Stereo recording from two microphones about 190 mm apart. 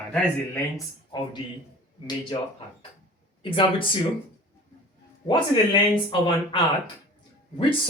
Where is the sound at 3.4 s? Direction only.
25° left (ahead or behind).